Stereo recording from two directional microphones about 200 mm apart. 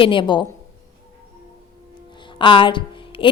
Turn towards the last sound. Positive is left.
turn(degrees=25)  # may be behind; listen again after turning